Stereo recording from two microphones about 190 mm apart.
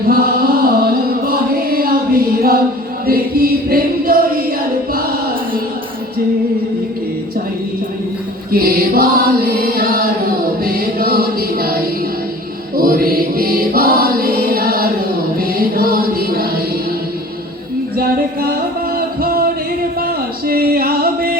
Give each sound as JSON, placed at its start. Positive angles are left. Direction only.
{"t": 0.1, "sound": "chant", "side_deg": -50}
{"t": 1.2, "sound": "a sound", "side_deg": -50}
{"t": 3.1, "sound": "music", "side_deg": -50}
{"t": 8.5, "sound": "chant", "side_deg": -50}
{"t": 10.6, "sound": "music", "side_deg": -50}
{"t": 12.7, "sound": "choir", "side_deg": -50}
{"t": 15.4, "sound": "music", "side_deg": -50}
{"t": 17.9, "sound": "music", "side_deg": -55}
{"t": 20.0, "sound": "a sound", "side_deg": -50}